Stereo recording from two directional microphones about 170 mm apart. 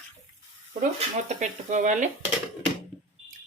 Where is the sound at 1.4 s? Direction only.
45° right (ahead or behind).